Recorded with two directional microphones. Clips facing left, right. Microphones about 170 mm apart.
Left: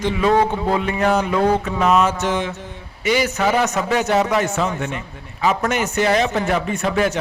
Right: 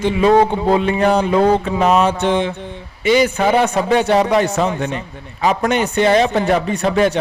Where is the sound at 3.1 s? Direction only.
30° right (ahead or behind).